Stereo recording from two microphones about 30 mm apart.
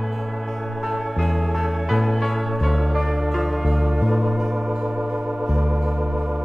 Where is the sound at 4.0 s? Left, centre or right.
Centre.